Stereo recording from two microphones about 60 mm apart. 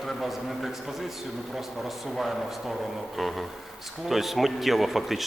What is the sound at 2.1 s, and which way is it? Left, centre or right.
Speech, centre.